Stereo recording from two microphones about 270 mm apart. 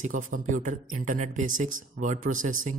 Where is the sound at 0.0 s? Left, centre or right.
Right.